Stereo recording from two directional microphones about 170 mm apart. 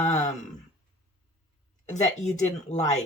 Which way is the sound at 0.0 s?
40° left (ahead or behind).